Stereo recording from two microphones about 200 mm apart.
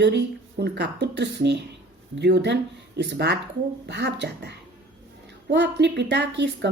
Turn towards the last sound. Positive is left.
turn(degrees=-60)  # may be behind; listen again after turning